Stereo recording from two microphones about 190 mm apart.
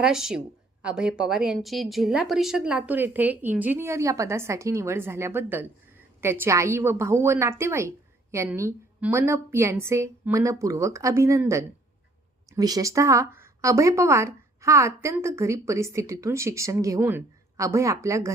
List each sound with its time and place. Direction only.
0.0 s speech: centre (ahead or behind)